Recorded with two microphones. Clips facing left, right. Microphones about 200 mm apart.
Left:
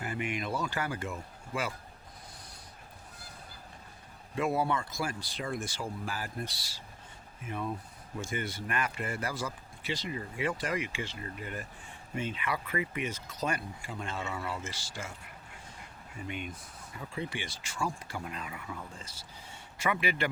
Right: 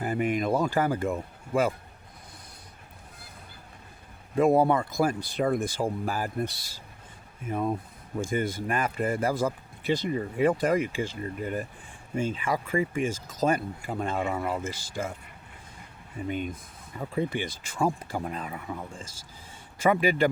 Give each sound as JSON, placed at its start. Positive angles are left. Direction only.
{"t": 0.0, "sound": "speech", "side_deg": -40}
{"t": 4.4, "sound": "speech", "side_deg": -50}
{"t": 7.4, "sound": "speech", "side_deg": -45}
{"t": 16.3, "sound": "speech", "side_deg": -40}
{"t": 18.3, "sound": "speech", "side_deg": -40}
{"t": 19.8, "sound": "speech", "side_deg": -40}